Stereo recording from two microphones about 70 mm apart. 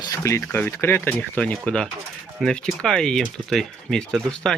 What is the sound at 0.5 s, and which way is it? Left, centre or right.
Speech, left.